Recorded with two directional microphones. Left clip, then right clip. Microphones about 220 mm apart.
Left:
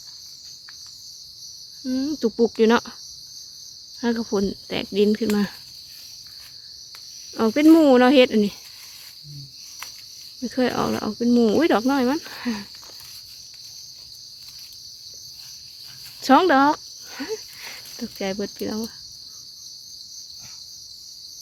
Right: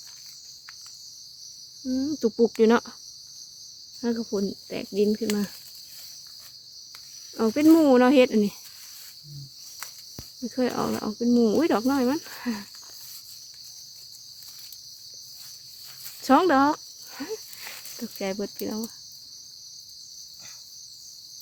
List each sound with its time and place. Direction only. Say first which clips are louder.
1.8 s speech: left 2 dB; 5° left (ahead or behind)
4.0 s speech: left 4 dB; 15° left (ahead or behind)
7.3 s speech: left 4 dB; 10° left (ahead or behind)
10.4 s speech: left 4 dB; 5° left (ahead or behind)
16.2 s cricket: left 4 dB; 5° left (ahead or behind)
18.0 s speech: left 3 dB; 5° left (ahead or behind)